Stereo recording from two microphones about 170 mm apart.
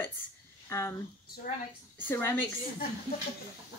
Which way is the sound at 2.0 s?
10° left (ahead or behind).